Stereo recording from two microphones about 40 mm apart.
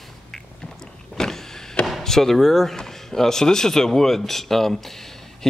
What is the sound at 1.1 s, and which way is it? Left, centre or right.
Power windows, centre.